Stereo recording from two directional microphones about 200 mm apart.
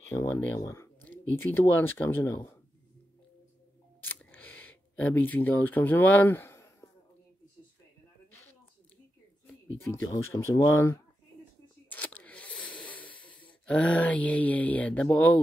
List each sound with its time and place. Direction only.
0.1 s speech: 15° left (ahead or behind)
4.0 s camera: 10° left (ahead or behind)
9.5 s speech: 10° left (ahead or behind)
11.9 s a sound: 5° left (ahead or behind)
13.1 s snort: 90° left
13.7 s speech: 5° left (ahead or behind)